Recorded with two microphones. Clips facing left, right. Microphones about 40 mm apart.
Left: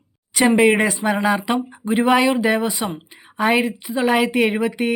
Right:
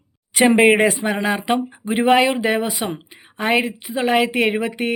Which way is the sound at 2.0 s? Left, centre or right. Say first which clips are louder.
Right 1 dB; right.